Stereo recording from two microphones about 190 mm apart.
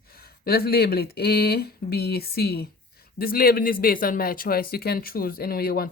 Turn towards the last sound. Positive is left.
turn(degrees=50)  # may be behind; listen again after turning